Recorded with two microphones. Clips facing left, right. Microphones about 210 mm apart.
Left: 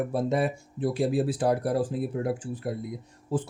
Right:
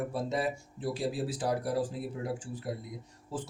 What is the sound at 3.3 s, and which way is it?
Speech, 55° left (ahead or behind).